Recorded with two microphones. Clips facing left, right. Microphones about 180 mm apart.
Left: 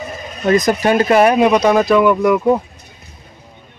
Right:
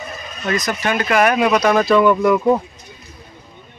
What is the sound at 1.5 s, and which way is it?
Speech, 10° left (ahead or behind).